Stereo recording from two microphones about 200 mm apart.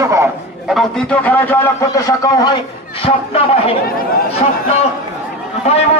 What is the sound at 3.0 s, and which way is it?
Speech, 30° left (ahead or behind).